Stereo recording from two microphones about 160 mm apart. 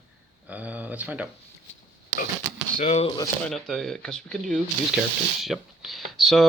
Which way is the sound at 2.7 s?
40° left (ahead or behind).